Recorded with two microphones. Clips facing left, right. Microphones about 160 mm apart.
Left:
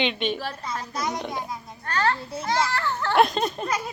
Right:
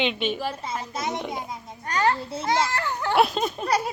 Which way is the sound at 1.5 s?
20° right (ahead or behind).